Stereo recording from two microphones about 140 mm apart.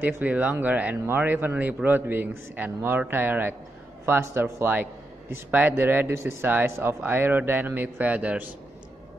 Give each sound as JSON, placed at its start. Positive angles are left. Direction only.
{"t": 0.0, "sound": "speech", "side_deg": -10}